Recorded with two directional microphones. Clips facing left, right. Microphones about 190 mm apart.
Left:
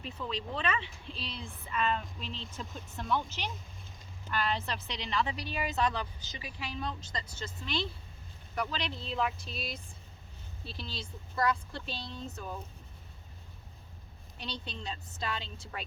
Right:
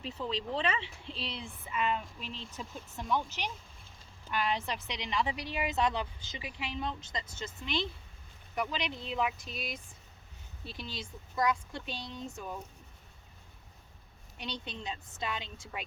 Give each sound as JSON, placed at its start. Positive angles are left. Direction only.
{"t": 0.0, "sound": "speech", "side_deg": -30}
{"t": 1.7, "sound": "speech", "side_deg": -10}
{"t": 14.3, "sound": "speech", "side_deg": -15}